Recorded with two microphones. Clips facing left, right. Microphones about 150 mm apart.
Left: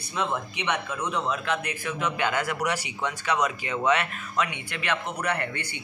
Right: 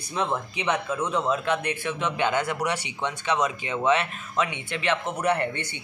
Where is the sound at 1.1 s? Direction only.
30° right (ahead or behind).